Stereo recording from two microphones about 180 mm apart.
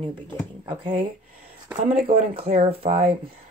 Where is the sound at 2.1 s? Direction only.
30° right (ahead or behind).